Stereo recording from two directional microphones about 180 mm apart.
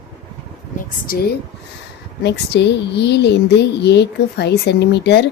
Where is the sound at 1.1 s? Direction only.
55° left (ahead or behind).